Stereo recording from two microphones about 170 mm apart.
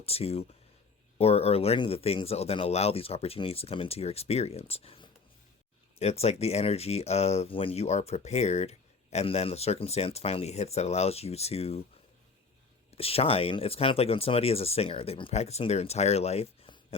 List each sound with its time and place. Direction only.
0.0 s speech: 35° left (ahead or behind)
13.0 s speech: 35° left (ahead or behind)